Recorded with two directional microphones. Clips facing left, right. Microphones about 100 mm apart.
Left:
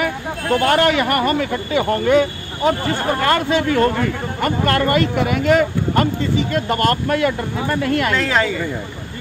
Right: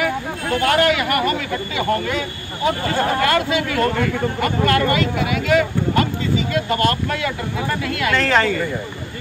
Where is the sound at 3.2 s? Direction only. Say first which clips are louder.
Left 2 dB; 35° left (ahead or behind).